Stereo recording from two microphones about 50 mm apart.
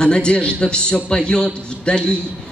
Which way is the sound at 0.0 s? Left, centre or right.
Centre.